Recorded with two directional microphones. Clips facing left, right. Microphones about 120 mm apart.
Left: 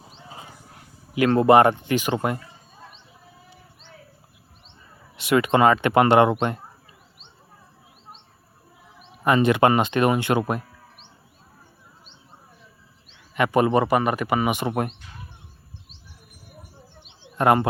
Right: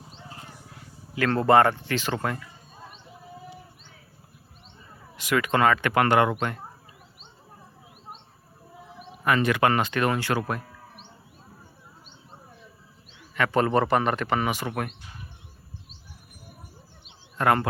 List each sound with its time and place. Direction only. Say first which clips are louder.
1.1 s speech: left 4 dB; 15° left (ahead or behind)
5.1 s speech: left 5 dB; 20° left (ahead or behind)
9.2 s speech: left 4 dB; 20° left (ahead or behind)
13.3 s speech: left 3 dB; 15° left (ahead or behind)
17.3 s speech: left 4 dB; 20° left (ahead or behind)